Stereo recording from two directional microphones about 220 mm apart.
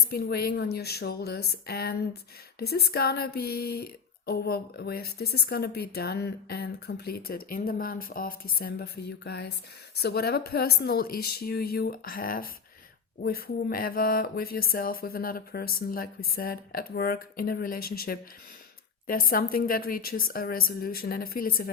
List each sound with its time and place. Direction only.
0.1 s a woman's voice: 45° left (ahead or behind)